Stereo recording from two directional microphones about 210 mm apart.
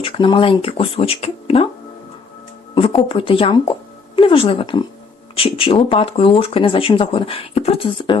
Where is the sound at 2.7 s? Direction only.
25° left (ahead or behind).